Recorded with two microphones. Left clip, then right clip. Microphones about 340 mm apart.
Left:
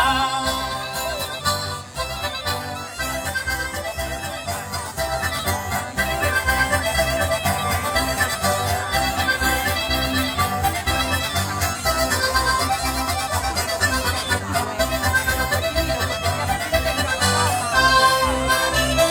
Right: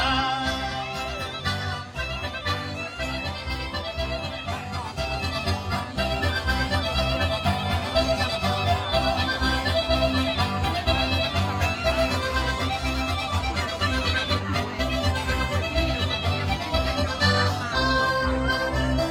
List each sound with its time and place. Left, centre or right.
0.0 s music: centre
6.0 s music: centre